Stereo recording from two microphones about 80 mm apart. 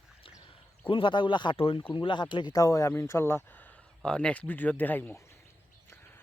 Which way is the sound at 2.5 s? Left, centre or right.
Left.